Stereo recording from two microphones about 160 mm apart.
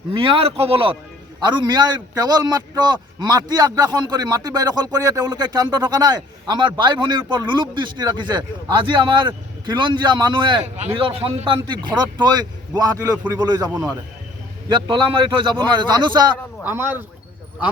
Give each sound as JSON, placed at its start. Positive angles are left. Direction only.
{"t": 0.1, "sound": "a man's voice", "side_deg": -35}
{"t": 14.7, "sound": "a man's voice", "side_deg": -30}
{"t": 16.6, "sound": "speech", "side_deg": -10}